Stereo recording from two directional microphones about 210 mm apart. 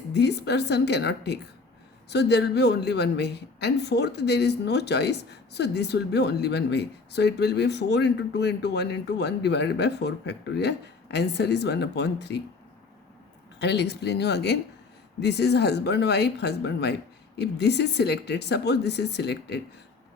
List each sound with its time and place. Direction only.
0.1 s a woman's voice: 55° left (ahead or behind)
13.6 s a woman's voice: 55° left (ahead or behind)